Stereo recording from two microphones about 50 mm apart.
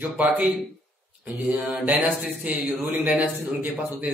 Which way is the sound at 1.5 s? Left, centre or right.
Right.